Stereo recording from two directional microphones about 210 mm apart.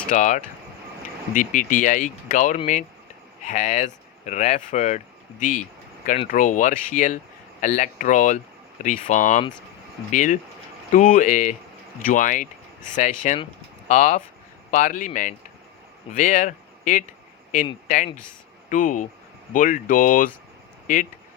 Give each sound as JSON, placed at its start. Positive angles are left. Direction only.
{"t": 0.1, "sound": "speech", "side_deg": 35}